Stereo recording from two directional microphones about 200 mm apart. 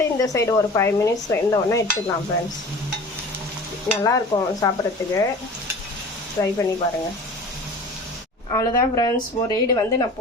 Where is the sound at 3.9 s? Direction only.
10° left (ahead or behind).